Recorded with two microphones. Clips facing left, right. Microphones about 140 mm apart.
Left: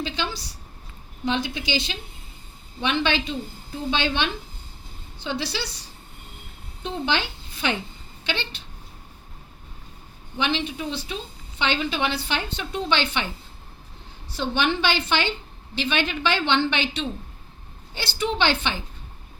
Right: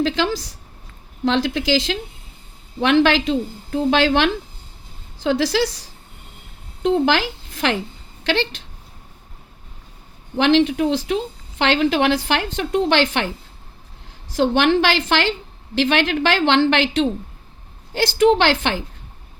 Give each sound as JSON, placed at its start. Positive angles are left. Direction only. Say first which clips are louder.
{"t": 0.0, "sound": "a woman's voice", "louder": "right 9 dB", "side_deg": -90}
{"t": 6.8, "sound": "a woman's voice", "louder": "right 9 dB", "side_deg": -90}
{"t": 10.3, "sound": "a woman's voice", "louder": "right 11 dB", "side_deg": -90}
{"t": 14.3, "sound": "a woman's voice", "louder": "right 8 dB", "side_deg": -90}